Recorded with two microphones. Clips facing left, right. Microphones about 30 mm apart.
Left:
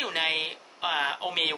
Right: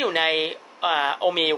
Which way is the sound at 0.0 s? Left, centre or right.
Centre.